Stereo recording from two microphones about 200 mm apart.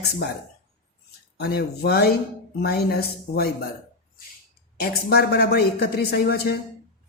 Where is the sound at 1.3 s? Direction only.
55° left (ahead or behind).